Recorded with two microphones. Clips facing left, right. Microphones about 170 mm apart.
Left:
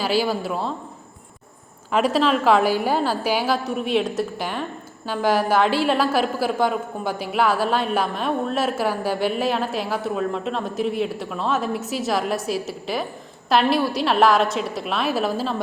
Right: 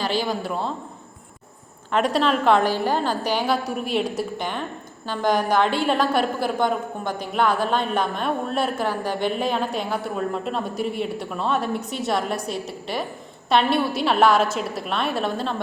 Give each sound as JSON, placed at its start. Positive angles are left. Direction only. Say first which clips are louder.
{"t": 0.0, "sound": "a woman's voice", "louder": "left 3 dB", "side_deg": 5}
{"t": 1.9, "sound": "a woman's voice", "louder": "left 1 dB", "side_deg": 5}